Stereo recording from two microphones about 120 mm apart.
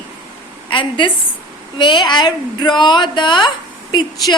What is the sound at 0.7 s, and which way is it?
A woman's voice, 45° left (ahead or behind).